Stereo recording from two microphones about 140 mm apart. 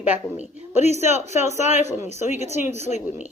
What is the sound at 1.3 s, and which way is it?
Speech, 55° left (ahead or behind).